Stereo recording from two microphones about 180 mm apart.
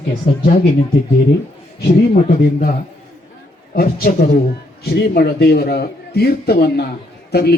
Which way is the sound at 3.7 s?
55° left (ahead or behind).